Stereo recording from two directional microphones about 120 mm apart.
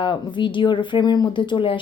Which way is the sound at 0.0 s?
40° left (ahead or behind).